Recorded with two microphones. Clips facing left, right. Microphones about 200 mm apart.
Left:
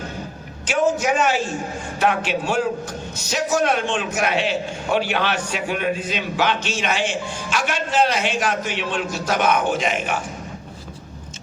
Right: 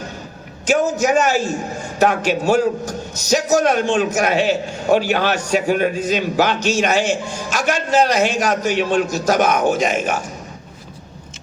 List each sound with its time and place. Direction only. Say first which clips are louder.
0.7 s a man's voice: right 3 dB; 40° right (ahead or behind)